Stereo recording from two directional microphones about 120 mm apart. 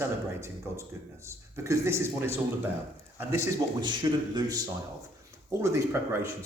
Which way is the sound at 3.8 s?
40° right (ahead or behind).